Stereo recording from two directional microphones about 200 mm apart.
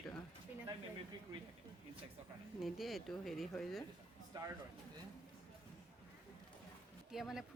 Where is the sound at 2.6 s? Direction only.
Centre (ahead or behind).